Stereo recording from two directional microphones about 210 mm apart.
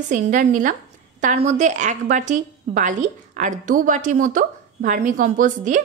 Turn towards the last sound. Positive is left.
turn(degrees=-40)  # may be behind; listen again after turning